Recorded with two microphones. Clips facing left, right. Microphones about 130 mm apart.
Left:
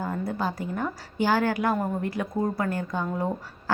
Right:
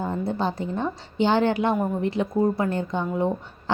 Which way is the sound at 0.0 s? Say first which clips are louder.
Right 3 dB; 25° right (ahead or behind).